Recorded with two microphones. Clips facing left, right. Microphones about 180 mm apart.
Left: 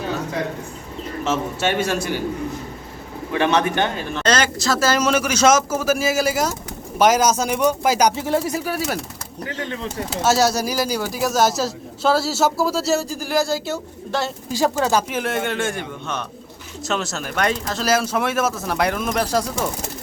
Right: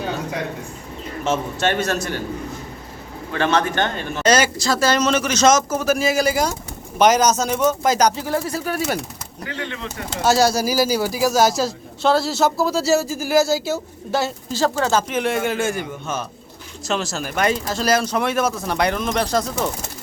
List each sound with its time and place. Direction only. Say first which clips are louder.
1.2 s a man's voice: right 1 dB; 5° left (ahead or behind)
3.3 s a man's voice: left 1 dB; 15° left (ahead or behind)
4.1 s a man's voice: right 6 dB; 10° right (ahead or behind); by 8.2 s 10° left (ahead or behind)
8.2 s speech: left 2 dB; 20° left (ahead or behind)
8.6 s speech: right 1 dB; centre (ahead or behind)
9.5 s speech: left 1 dB; 40° left (ahead or behind)
10.1 s speech: right 1 dB; centre (ahead or behind)
14.5 s a man's voice: left 1 dB; 15° left (ahead or behind)
15.2 s speech: right 2 dB; centre (ahead or behind)